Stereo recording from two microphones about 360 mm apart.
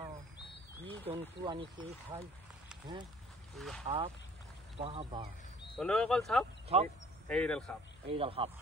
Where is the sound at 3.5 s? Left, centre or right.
Centre.